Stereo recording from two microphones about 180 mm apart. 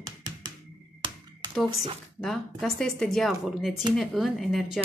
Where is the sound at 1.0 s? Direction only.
30° right (ahead or behind).